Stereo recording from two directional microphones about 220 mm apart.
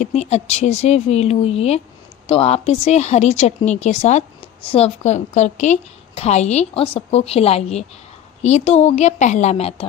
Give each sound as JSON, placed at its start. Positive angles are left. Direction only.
{"t": 0.0, "sound": "a woman's voice", "side_deg": 30}